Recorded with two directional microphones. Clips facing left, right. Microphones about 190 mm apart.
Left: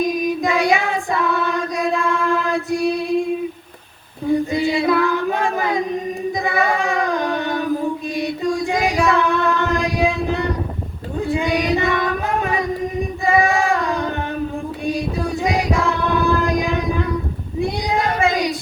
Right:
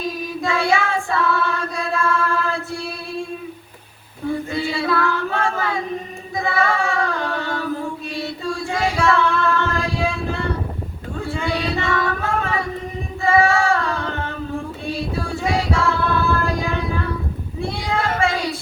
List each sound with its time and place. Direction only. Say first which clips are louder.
0.0 s child singing: left 6 dB; 15° left (ahead or behind)
4.3 s child singing: left 5 dB; 15° left (ahead or behind)
8.1 s a sound: left 4 dB; 15° left (ahead or behind)
11.2 s child singing: left 5 dB; 15° left (ahead or behind)
13.2 s female singing: right 1 dB; 15° left (ahead or behind)
14.8 s singing: left 5 dB; 15° left (ahead or behind)
17.6 s child singing: left 3 dB; 15° left (ahead or behind)